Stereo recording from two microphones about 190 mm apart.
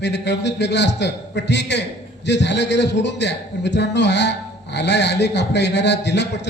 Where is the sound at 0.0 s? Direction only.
65° left (ahead or behind).